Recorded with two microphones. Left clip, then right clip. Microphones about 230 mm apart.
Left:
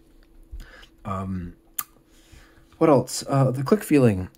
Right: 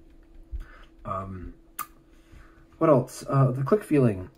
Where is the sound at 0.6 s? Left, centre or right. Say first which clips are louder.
Left 4 dB; left.